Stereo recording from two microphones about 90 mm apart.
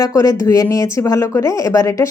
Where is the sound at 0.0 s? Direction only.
35° left (ahead or behind).